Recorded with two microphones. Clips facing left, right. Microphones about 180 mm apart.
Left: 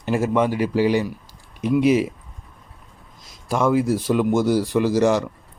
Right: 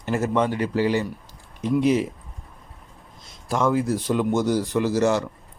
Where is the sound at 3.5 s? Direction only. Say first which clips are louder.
Left 3 dB; 10° left (ahead or behind).